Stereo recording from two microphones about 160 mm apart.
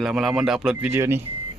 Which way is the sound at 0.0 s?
Centre (ahead or behind).